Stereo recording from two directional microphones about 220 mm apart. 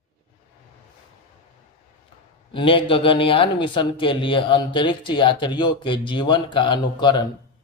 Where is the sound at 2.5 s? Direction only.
25° left (ahead or behind).